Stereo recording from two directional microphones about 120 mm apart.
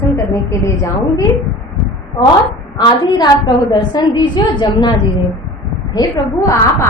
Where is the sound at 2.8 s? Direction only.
40° left (ahead or behind).